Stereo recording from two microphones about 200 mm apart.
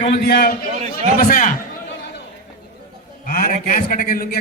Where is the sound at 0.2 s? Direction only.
50° left (ahead or behind).